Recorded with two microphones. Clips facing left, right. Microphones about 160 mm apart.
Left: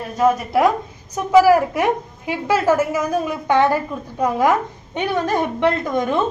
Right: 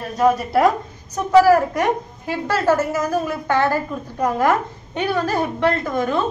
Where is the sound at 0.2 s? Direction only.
Centre (ahead or behind).